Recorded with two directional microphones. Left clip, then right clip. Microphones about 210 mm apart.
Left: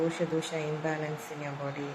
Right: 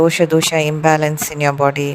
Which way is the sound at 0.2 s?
50° right (ahead or behind).